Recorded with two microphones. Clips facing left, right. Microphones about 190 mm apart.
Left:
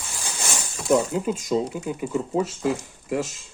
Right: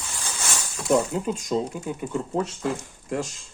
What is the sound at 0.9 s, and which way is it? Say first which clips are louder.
Speech: left 1 dB; 5° left (ahead or behind).